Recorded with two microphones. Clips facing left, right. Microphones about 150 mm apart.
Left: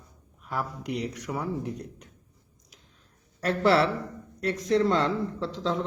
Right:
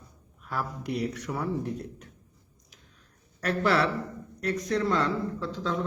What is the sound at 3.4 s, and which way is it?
Speech, 25° left (ahead or behind).